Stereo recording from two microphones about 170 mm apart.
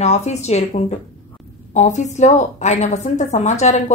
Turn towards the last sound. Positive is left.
turn(degrees=45)  # may be behind; listen again after turning